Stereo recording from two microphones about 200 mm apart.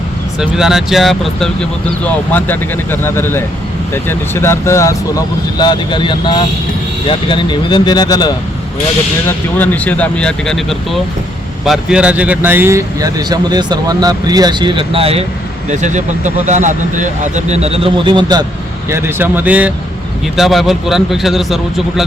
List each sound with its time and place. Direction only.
0.3 s speech: 5° right (ahead or behind); by 8.3 s 20° left (ahead or behind)
9.2 s speech: 10° left (ahead or behind)